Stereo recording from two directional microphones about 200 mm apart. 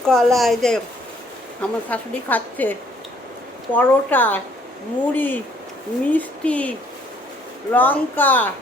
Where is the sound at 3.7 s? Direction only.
10° left (ahead or behind).